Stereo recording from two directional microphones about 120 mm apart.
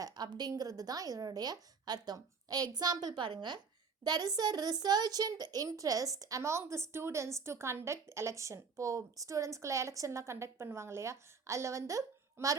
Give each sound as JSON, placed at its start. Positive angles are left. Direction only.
{"t": 0.0, "sound": "a child's voice", "side_deg": -35}